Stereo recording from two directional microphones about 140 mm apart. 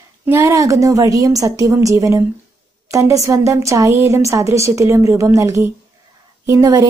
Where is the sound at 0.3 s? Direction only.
20° right (ahead or behind).